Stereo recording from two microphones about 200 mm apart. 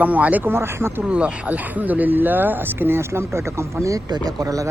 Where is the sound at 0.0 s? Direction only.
5° right (ahead or behind).